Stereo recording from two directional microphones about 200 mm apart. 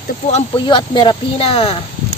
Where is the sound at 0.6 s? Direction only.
25° left (ahead or behind).